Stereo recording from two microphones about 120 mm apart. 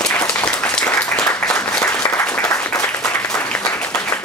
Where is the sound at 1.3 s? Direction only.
10° left (ahead or behind).